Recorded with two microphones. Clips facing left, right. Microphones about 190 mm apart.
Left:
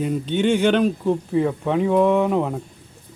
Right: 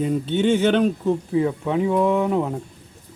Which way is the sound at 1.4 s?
5° right (ahead or behind).